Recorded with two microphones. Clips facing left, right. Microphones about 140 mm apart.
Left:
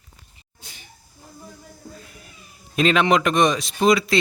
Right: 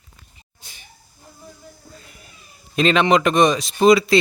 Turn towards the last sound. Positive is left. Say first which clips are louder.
# right 4 dB
turn(degrees=0)  # may be behind; listen again after turning